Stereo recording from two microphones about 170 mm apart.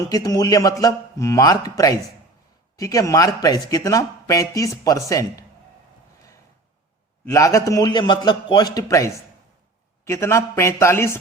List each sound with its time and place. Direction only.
0.1 s speech: 20° left (ahead or behind)
7.3 s a man's voice: 20° left (ahead or behind)